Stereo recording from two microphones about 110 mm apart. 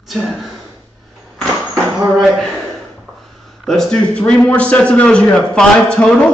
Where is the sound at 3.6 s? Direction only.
5° left (ahead or behind).